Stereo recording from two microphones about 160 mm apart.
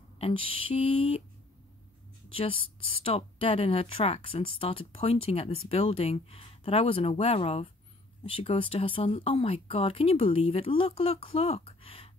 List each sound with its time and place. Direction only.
0.2 s speech: 35° left (ahead or behind)
2.2 s speech: 35° left (ahead or behind)